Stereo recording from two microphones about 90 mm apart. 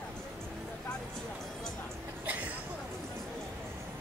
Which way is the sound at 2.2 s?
15° right (ahead or behind).